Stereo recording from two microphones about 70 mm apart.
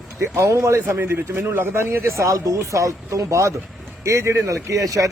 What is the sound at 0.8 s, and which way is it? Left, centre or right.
Speech, right.